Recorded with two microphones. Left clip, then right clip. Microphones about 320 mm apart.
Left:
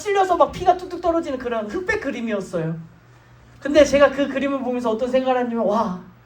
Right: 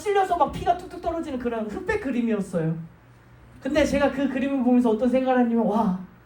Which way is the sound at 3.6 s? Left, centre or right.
Left.